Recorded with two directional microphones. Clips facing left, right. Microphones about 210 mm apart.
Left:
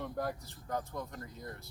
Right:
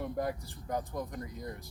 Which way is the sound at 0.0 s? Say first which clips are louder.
Right 3 dB; 5° right (ahead or behind).